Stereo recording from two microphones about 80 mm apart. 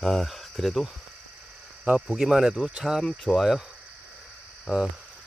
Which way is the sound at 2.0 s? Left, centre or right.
Centre.